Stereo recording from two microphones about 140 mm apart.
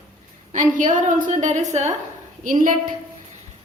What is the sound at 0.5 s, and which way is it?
A woman's voice, 65° right (ahead or behind).